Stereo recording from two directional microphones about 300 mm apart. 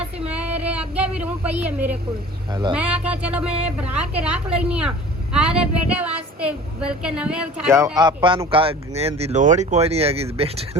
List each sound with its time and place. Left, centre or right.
0.0 s a sound: centre
2.5 s speech: centre
2.7 s a woman's voice: centre